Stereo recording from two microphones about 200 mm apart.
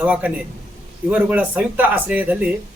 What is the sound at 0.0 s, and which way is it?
Speech, 5° right (ahead or behind).